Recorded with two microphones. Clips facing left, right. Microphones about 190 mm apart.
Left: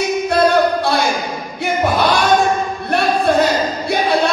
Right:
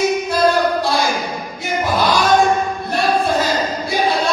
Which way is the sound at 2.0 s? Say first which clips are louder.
Right 2 dB; 60° left (ahead or behind).